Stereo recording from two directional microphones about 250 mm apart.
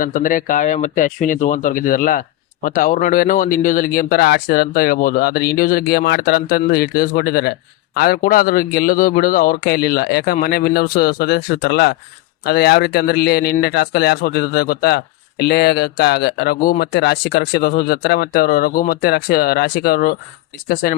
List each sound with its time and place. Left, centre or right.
0.0 s speech: left